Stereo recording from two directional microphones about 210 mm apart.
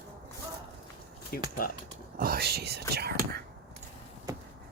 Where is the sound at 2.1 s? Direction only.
45° right (ahead or behind).